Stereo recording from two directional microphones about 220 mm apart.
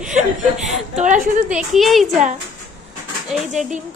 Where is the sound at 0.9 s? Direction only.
35° right (ahead or behind).